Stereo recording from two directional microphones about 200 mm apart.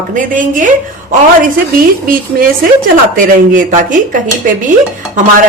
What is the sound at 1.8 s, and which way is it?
A woman's voice, 45° right (ahead or behind).